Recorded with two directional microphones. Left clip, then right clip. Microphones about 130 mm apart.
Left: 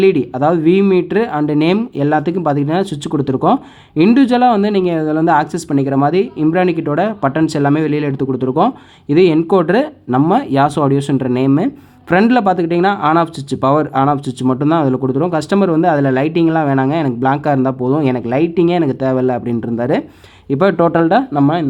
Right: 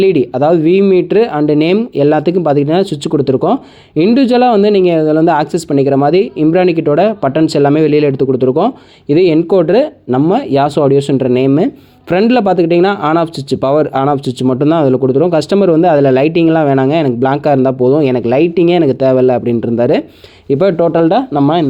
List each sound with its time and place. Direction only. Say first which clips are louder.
0.0 s speech: right 2 dB; 25° right (ahead or behind)